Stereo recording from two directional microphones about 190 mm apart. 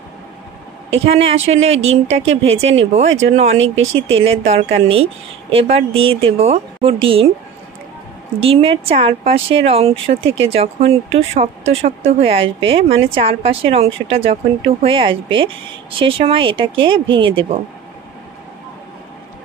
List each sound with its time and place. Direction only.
1.0 s speech: 30° right (ahead or behind)
8.4 s speech: 30° right (ahead or behind)